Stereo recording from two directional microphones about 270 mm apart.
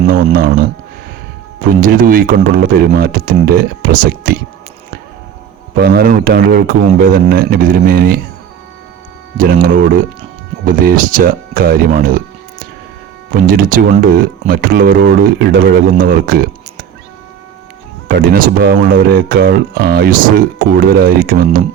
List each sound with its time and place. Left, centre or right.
0.3 s speech: right
1.8 s speech: right
5.7 s speech: right
9.4 s speech: right
18.2 s speech: right